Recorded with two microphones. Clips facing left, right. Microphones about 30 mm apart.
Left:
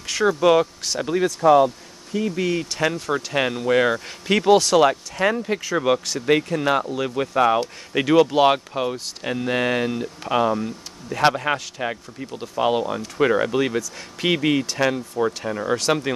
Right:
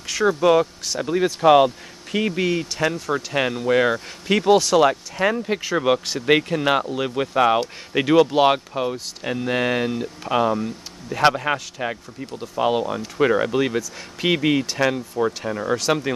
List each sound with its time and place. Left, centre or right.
0.0 s speech: centre
1.4 s speech: right
2.1 s speech: right
2.5 s speech: centre
5.6 s speech: centre
6.8 s speech: centre